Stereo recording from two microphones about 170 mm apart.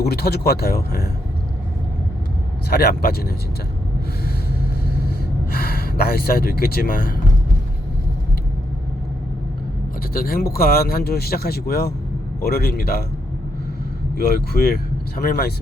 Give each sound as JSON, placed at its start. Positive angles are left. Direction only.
{"t": 0.0, "sound": "speech", "side_deg": 70}
{"t": 2.6, "sound": "speech", "side_deg": 65}
{"t": 4.9, "sound": "gasp", "side_deg": 65}
{"t": 10.1, "sound": "speech", "side_deg": 60}
{"t": 14.5, "sound": "speech", "side_deg": 60}